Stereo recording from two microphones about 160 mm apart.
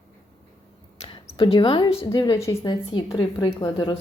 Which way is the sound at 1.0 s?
35° left (ahead or behind).